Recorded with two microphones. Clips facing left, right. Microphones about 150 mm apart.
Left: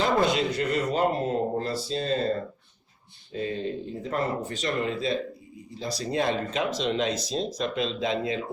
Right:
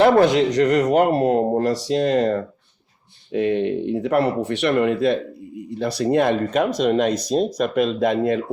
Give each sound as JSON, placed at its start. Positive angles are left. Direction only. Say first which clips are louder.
{"t": 0.0, "sound": "speech", "louder": "right 9 dB", "side_deg": -70}